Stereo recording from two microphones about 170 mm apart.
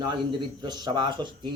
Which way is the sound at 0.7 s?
25° right (ahead or behind).